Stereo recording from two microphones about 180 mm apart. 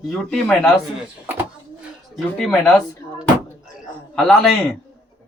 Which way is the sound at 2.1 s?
5° left (ahead or behind).